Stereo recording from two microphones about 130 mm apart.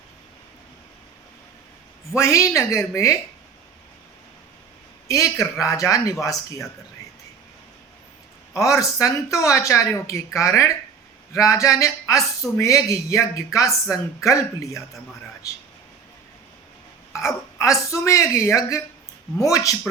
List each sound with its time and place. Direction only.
2.1 s speech: 20° left (ahead or behind)
5.0 s speech: 25° left (ahead or behind)
8.5 s speech: 25° left (ahead or behind)
17.2 s speech: 20° left (ahead or behind)